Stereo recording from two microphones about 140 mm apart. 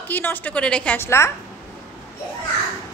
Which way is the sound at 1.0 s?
20° left (ahead or behind).